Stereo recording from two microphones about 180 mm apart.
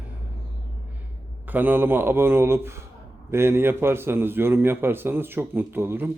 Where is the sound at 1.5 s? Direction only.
10° right (ahead or behind).